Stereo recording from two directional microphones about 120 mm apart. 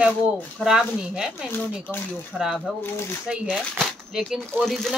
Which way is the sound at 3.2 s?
10° right (ahead or behind).